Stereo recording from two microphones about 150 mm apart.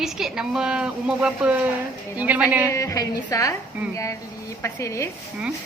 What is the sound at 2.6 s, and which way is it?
A woman's voice, 20° left (ahead or behind).